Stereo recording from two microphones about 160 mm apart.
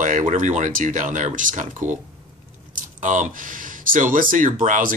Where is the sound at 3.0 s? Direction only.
55° right (ahead or behind).